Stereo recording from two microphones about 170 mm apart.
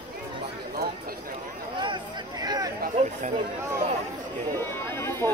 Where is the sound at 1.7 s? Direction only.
30° right (ahead or behind).